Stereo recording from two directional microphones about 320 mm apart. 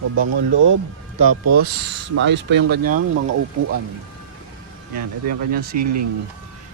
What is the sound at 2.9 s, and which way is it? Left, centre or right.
Speech, right.